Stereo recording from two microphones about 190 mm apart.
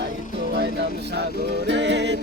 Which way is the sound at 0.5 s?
60° right (ahead or behind).